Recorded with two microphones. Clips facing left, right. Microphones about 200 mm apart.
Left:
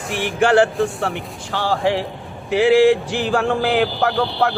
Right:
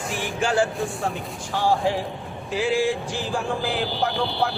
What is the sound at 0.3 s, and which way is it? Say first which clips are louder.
Speech: left 8 dB; 70° left (ahead or behind).